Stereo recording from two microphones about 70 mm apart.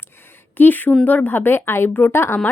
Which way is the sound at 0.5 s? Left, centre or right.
Left.